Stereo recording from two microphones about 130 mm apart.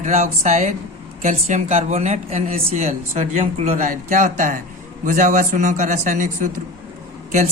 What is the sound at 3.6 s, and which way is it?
A man's voice, 80° right.